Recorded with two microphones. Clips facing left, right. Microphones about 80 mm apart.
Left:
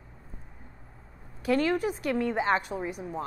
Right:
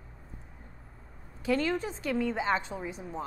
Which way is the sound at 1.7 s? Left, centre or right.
Centre.